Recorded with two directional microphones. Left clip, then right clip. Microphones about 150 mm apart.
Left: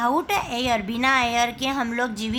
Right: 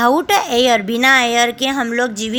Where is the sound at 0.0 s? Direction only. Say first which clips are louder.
Right 8 dB; 35° right (ahead or behind).